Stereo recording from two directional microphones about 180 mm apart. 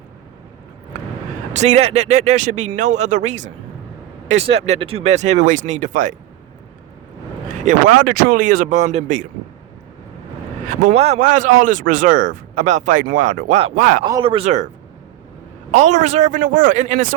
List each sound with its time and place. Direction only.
1.5 s speech: 40° right (ahead or behind)
7.6 s speech: 45° right (ahead or behind)
10.7 s speech: 40° right (ahead or behind)
14.0 s speech: 25° right (ahead or behind)
15.7 s speech: 40° right (ahead or behind)